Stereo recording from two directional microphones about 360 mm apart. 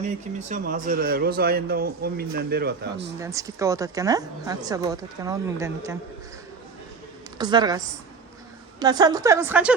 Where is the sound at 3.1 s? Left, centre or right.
Centre.